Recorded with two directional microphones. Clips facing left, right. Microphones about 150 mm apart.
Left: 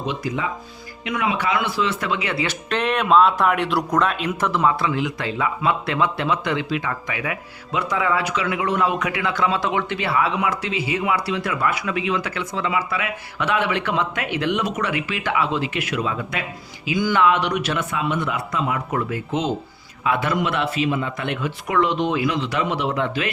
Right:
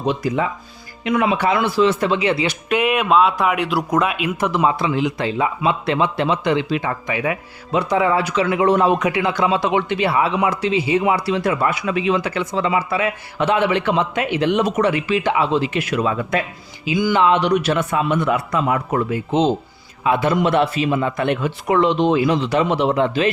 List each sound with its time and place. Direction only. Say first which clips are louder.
1.0 s a man's voice: right 5 dB; 35° right (ahead or behind)
2.5 s speech: right 4 dB; 10° right (ahead or behind); by 16.4 s 40° right (ahead or behind)
17.0 s speech: right 3 dB; 15° right (ahead or behind)
17.2 s a man's voice: right 4 dB; 30° right (ahead or behind); by 18.9 s 45° right (ahead or behind)
18.9 s a man's voice: right 6 dB; 25° right (ahead or behind)